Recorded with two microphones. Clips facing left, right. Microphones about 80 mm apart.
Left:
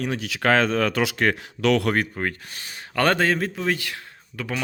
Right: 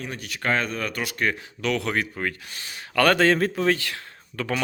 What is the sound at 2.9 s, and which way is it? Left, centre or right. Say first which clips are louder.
Speech: right 1 dB; left.